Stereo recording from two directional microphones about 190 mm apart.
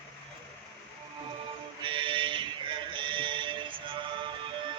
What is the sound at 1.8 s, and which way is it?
Music, 25° right (ahead or behind).